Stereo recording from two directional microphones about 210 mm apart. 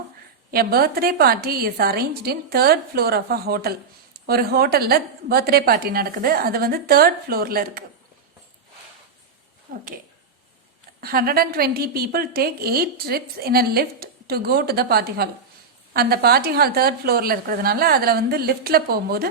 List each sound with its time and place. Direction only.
0.5 s a woman's voice: 45° right (ahead or behind)
9.7 s speech: 40° right (ahead or behind)
11.0 s a woman's voice: 45° right (ahead or behind)